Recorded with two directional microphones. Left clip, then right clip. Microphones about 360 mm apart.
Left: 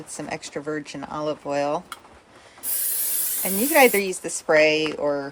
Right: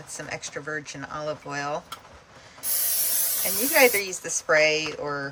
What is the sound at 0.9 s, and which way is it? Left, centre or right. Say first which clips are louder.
Speech: left 4 dB; centre.